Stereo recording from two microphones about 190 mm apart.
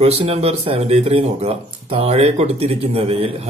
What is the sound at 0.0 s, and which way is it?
Speech, 35° right (ahead or behind).